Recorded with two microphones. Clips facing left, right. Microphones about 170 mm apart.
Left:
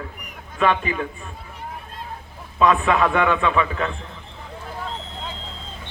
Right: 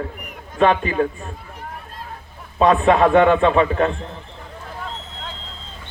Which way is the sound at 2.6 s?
35° right (ahead or behind).